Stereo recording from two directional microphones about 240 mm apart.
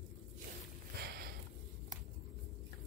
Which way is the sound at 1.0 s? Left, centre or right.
Right.